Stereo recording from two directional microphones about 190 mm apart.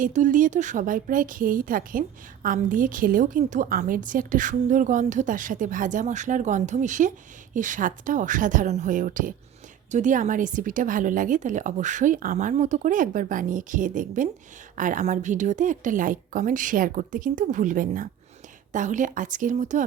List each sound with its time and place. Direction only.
0.0 s speech: 40° right (ahead or behind)